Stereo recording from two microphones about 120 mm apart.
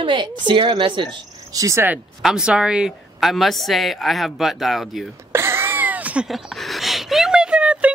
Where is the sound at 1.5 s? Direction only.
25° right (ahead or behind).